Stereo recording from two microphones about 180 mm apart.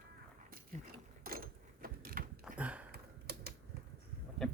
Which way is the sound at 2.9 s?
60° right (ahead or behind).